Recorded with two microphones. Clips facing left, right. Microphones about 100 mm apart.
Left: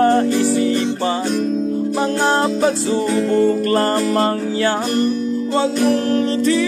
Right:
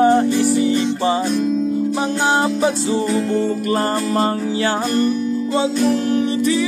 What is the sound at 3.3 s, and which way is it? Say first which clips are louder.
Music: left 4 dB; 45° left (ahead or behind).